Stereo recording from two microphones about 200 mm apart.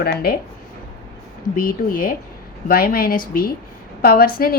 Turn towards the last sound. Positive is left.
turn(degrees=45)  # may be behind; listen again after turning